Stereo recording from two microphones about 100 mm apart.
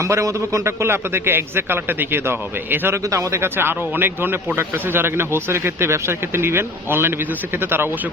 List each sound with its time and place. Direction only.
0.0 s a man's voice: 30° right (ahead or behind)